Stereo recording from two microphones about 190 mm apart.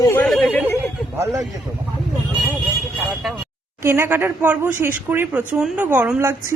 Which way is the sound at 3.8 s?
15° right (ahead or behind).